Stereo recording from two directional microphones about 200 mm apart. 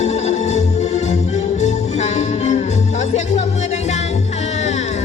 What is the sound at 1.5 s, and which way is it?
Music, 35° left (ahead or behind).